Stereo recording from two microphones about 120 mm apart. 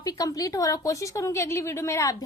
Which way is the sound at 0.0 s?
30° left (ahead or behind).